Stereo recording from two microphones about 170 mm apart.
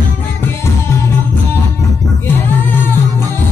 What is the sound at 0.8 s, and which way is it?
Music, 15° left (ahead or behind).